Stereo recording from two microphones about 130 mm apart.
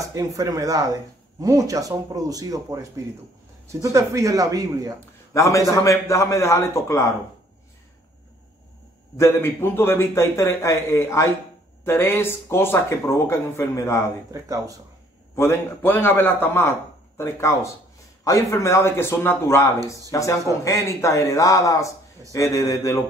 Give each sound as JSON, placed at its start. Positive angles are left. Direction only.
{"t": 0.0, "sound": "speech", "side_deg": -25}
{"t": 5.3, "sound": "a man's voice", "side_deg": 25}
{"t": 9.2, "sound": "speech", "side_deg": 15}
{"t": 14.3, "sound": "speech", "side_deg": -25}
{"t": 15.3, "sound": "a man's voice", "side_deg": 20}